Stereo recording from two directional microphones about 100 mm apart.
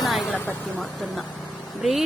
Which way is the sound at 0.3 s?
15° left (ahead or behind).